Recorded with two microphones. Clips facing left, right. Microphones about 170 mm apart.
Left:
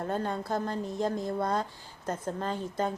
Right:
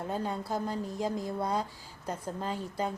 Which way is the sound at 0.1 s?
5° right (ahead or behind).